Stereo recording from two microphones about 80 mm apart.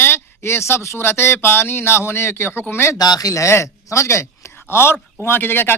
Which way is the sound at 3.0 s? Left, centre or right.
Left.